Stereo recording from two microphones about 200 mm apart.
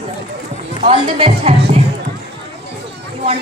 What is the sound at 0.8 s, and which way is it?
Speech, 30° right (ahead or behind).